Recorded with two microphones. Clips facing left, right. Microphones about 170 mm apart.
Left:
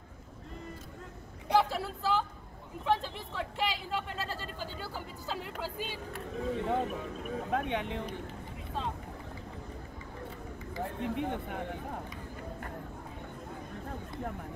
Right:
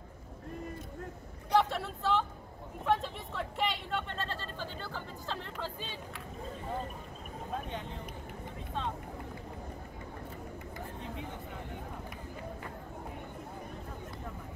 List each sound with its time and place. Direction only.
1.5 s speech: 5° left (ahead or behind)
6.4 s speech: 75° left (ahead or behind)
11.0 s a man's voice: 65° left (ahead or behind)